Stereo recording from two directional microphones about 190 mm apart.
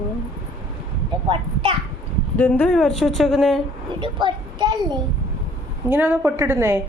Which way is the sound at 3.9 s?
25° right (ahead or behind).